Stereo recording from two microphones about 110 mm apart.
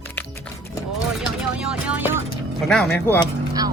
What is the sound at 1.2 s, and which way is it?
Speech, 10° right (ahead or behind).